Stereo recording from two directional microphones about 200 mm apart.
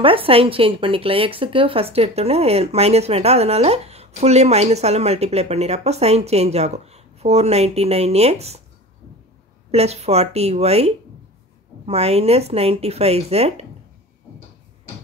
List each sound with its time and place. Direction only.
0.0 s speech: 25° right (ahead or behind)
9.7 s speech: 30° right (ahead or behind)